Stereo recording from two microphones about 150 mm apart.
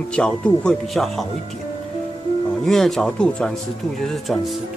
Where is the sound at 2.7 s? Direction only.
Centre (ahead or behind).